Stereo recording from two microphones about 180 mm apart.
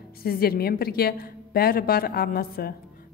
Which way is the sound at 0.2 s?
55° left (ahead or behind).